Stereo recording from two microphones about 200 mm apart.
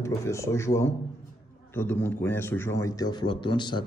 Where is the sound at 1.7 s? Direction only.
10° left (ahead or behind).